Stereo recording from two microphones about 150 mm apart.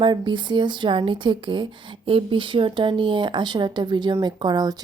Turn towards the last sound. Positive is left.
turn(degrees=-25)  # may be behind; listen again after turning